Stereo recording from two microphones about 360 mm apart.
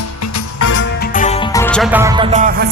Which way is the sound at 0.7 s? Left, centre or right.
Left.